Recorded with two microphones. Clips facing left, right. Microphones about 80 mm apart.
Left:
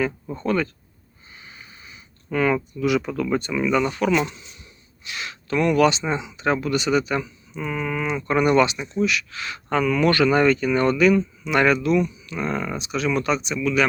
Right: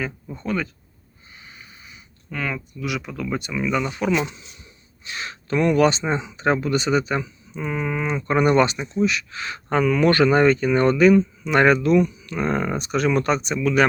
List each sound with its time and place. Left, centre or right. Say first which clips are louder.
0.3 s speech: left 3 dB; centre
1.3 s a sound: left 1 dB; centre
2.3 s speech: left 8 dB; centre
2.8 s speech: left 5 dB; centre
3.7 s speech: left 2 dB; centre
5.0 s speech: right 1 dB; right